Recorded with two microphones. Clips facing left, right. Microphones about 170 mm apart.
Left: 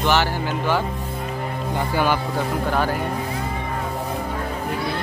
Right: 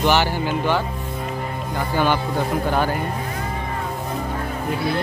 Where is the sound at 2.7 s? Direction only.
Centre (ahead or behind).